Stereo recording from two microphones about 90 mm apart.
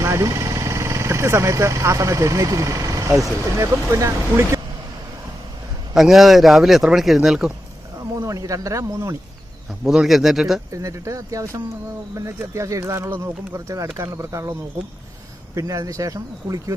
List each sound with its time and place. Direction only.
0.0 s speech: 35° right (ahead or behind)
5.9 s a man's voice: 5° right (ahead or behind)
8.2 s speech: 40° right (ahead or behind)
9.8 s a man's voice: 5° right (ahead or behind)
10.7 s speech: 35° right (ahead or behind)
15.5 s speech: 40° right (ahead or behind)